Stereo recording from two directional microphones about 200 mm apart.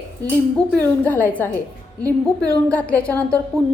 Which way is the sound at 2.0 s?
15° right (ahead or behind).